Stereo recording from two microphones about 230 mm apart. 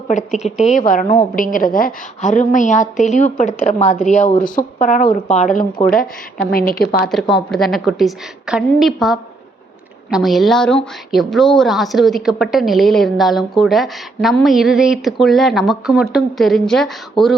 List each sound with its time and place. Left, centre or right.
0.1 s a woman's voice: left
7.0 s a woman's voice: centre